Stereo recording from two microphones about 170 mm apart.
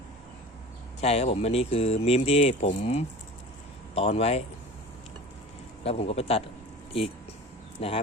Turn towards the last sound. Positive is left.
turn(degrees=35)  # may be behind; listen again after turning